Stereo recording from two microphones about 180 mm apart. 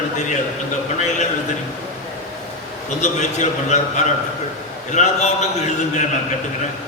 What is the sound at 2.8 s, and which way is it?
A man's voice, 40° left (ahead or behind).